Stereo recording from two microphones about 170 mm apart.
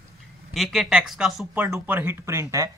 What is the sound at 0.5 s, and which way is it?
Speech, centre (ahead or behind).